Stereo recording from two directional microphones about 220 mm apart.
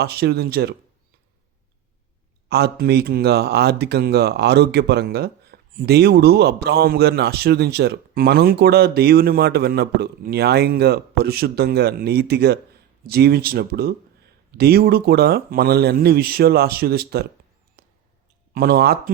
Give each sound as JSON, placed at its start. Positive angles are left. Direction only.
{"t": 0.0, "sound": "speech", "side_deg": -45}
{"t": 2.5, "sound": "speech", "side_deg": -45}
{"t": 18.5, "sound": "speech", "side_deg": -45}